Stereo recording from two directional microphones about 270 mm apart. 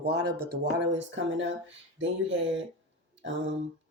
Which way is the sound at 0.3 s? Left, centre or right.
Right.